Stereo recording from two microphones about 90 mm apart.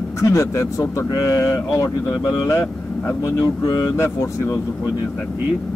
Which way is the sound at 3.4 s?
45° left (ahead or behind).